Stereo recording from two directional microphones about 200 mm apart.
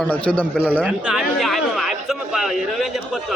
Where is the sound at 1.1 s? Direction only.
Centre (ahead or behind).